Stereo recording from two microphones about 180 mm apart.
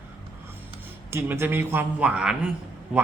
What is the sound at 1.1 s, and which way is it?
A man's voice, 15° right (ahead or behind).